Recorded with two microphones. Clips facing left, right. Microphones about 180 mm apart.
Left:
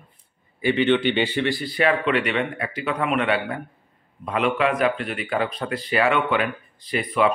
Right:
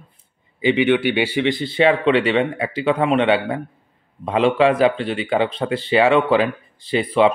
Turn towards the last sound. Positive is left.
turn(degrees=-30)  # may be behind; listen again after turning